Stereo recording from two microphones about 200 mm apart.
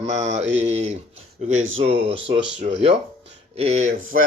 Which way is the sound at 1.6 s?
85° right.